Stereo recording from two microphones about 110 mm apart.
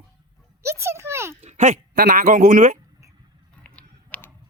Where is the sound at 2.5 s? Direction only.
90° right.